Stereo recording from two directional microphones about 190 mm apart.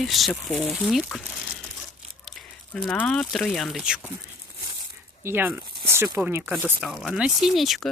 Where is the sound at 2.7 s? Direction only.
5° left (ahead or behind).